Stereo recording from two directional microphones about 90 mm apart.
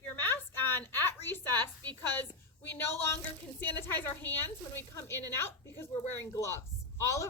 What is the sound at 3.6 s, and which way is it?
A woman's voice, 25° left (ahead or behind).